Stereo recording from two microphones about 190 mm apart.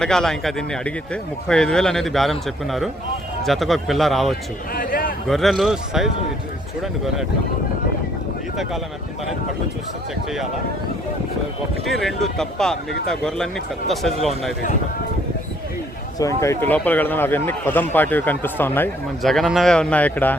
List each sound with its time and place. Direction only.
0.0 s speech: 5° left (ahead or behind)
4.7 s a sound: 50° left (ahead or behind)
5.3 s speech: centre (ahead or behind)
11.9 s speech: centre (ahead or behind)
16.1 s a man's voice: 15° left (ahead or behind)